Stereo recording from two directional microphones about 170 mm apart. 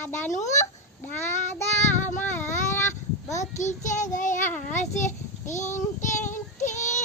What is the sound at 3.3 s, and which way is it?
Child singing, 45° left (ahead or behind).